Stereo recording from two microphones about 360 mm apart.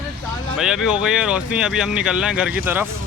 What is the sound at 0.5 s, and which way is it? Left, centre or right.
Speech, centre.